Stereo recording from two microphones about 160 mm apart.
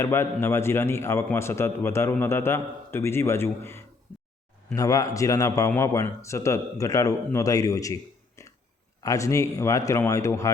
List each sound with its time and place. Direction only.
0.0 s a man's voice: 15° left (ahead or behind)
8.4 s a sound: 20° left (ahead or behind)
9.0 s a man's voice: 20° left (ahead or behind)